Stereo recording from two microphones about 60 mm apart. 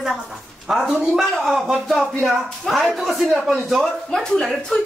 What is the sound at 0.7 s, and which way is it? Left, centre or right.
A man's voice, centre.